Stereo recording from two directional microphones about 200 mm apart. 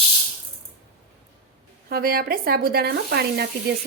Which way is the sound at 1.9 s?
50° right (ahead or behind).